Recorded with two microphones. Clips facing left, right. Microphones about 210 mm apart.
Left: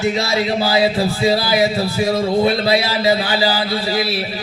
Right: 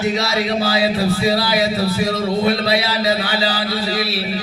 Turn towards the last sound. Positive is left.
turn(degrees=25)  # may be behind; listen again after turning